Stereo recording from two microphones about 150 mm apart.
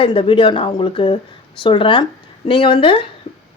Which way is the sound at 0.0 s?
35° left (ahead or behind).